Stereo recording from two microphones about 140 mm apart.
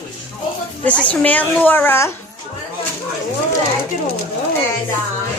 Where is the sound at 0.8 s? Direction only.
10° left (ahead or behind).